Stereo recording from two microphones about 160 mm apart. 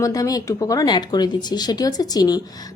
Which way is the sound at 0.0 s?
20° left (ahead or behind).